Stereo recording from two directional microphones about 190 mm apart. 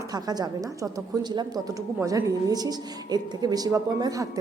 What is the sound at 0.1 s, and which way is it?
A woman's voice, 20° right (ahead or behind).